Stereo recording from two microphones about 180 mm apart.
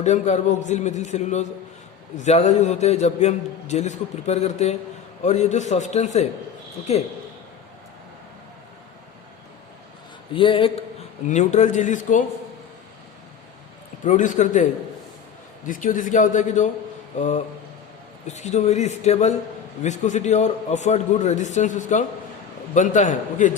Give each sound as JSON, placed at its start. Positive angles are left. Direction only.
{"t": 0.0, "sound": "a man's voice", "side_deg": 40}
{"t": 10.3, "sound": "speech", "side_deg": 30}
{"t": 11.3, "sound": "speech", "side_deg": 40}
{"t": 14.0, "sound": "a man's voice", "side_deg": 45}